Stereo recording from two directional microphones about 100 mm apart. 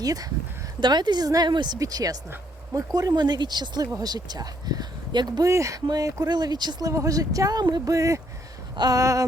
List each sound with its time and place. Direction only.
0.0 s speech: 35° right (ahead or behind)
5.5 s speech: 30° right (ahead or behind)